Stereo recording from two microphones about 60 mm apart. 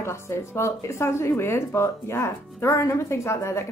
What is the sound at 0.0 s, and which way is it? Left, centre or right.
Speech, left.